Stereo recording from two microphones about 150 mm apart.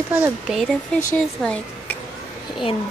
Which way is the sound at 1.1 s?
10° left (ahead or behind).